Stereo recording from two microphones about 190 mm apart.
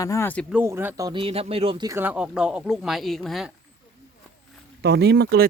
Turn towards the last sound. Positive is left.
turn(degrees=-60)  # may be behind; listen again after turning